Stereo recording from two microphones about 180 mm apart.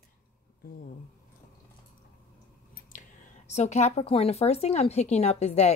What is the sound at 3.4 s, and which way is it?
Speech, 40° left (ahead or behind).